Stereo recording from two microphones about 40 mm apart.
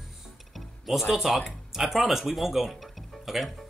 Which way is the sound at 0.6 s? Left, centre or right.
Centre.